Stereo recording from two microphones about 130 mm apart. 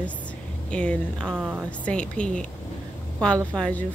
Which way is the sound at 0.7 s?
5° left (ahead or behind).